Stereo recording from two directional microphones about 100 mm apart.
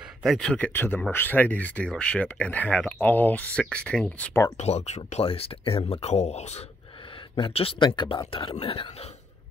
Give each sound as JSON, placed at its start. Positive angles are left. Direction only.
{"t": 0.2, "sound": "speech", "side_deg": 0}
{"t": 0.5, "sound": "speech", "side_deg": 15}
{"t": 4.0, "sound": "speech", "side_deg": 20}
{"t": 4.6, "sound": "speech", "side_deg": 90}
{"t": 7.3, "sound": "speech", "side_deg": 60}